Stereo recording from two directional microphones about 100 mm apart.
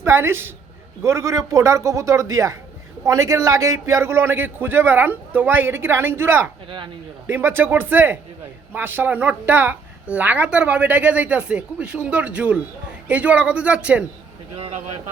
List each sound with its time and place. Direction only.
0.0 s a man's voice: 25° right (ahead or behind)
14.5 s speech: 85° right